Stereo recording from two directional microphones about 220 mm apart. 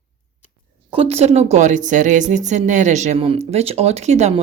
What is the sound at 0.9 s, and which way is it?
A woman's voice, 25° right (ahead or behind).